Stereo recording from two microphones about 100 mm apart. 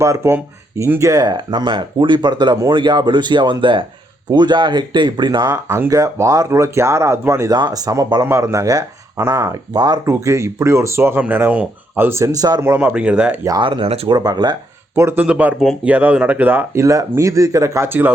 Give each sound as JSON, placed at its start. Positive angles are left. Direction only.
{"t": 0.0, "sound": "speech", "side_deg": -30}
{"t": 5.6, "sound": "speech", "side_deg": -30}
{"t": 7.5, "sound": "speech", "side_deg": -40}
{"t": 10.1, "sound": "speech", "side_deg": -30}
{"t": 12.6, "sound": "speech", "side_deg": -20}
{"t": 13.6, "sound": "speech", "side_deg": -55}
{"t": 14.1, "sound": "speech", "side_deg": -45}
{"t": 14.9, "sound": "speech", "side_deg": -25}
{"t": 16.8, "sound": "speech", "side_deg": -30}